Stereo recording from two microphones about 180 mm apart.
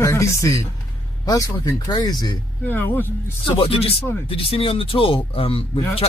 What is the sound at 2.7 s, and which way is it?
Speech, 10° left (ahead or behind).